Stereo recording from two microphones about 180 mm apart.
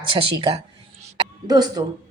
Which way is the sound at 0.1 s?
25° right (ahead or behind).